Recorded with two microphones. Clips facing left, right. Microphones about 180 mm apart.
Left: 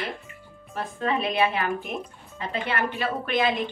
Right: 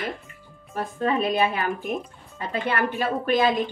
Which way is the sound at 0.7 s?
40° right (ahead or behind).